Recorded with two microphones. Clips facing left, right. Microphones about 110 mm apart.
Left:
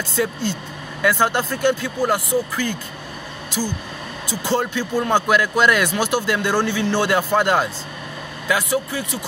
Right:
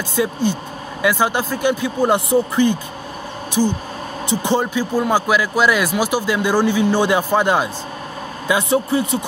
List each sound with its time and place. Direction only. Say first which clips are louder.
0.1 s speech: right 4 dB; 15° right (ahead or behind)
4.3 s speech: right 3 dB; 20° right (ahead or behind)
8.5 s a man's voice: right 4 dB; 25° right (ahead or behind)